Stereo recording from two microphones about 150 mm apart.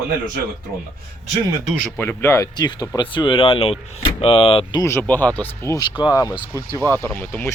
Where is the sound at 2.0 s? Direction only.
15° left (ahead or behind); by 4.8 s 40° left (ahead or behind).